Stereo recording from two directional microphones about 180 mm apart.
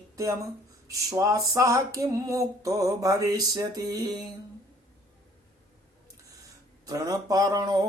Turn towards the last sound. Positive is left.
turn(degrees=-20)  # may be behind; listen again after turning